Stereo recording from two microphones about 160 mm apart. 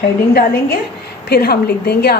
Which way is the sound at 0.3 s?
75° left (ahead or behind).